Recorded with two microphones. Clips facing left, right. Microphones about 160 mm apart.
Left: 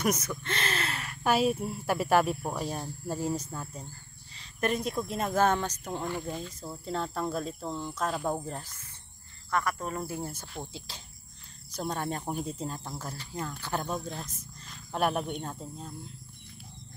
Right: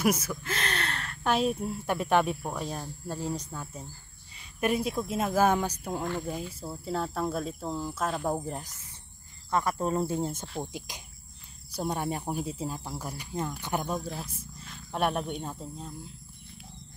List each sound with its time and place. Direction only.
0.0 s speech: 5° right (ahead or behind)
4.4 s speech: 10° right (ahead or behind)